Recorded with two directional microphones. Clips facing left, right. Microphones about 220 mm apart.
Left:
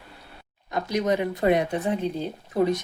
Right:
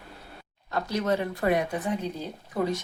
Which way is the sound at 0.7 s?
15° left (ahead or behind).